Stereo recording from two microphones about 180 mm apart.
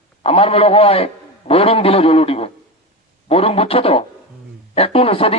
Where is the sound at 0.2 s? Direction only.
35° left (ahead or behind).